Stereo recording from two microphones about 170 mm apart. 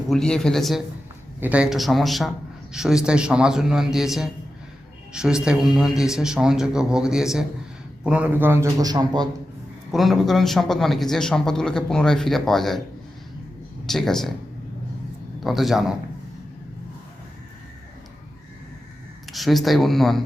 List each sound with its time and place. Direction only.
0.1 s a man's voice: 5° left (ahead or behind); by 9.3 s 25° right (ahead or behind)
9.9 s a man's voice: centre (ahead or behind)
13.8 s a man's voice: centre (ahead or behind)
15.4 s a man's voice: centre (ahead or behind)
19.3 s a man's voice: centre (ahead or behind)